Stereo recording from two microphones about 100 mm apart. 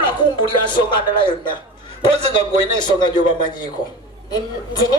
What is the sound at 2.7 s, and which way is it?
A woman's voice, 45° left (ahead or behind).